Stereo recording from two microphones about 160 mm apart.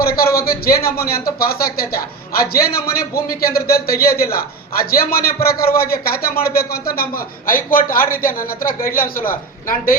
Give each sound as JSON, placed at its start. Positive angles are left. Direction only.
{"t": 0.0, "sound": "a man's voice", "side_deg": 70}